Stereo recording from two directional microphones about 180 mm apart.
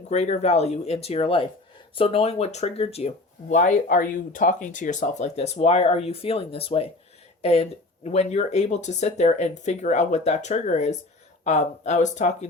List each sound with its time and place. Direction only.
0.1 s speech: 40° left (ahead or behind)
3.5 s speech: 45° left (ahead or behind)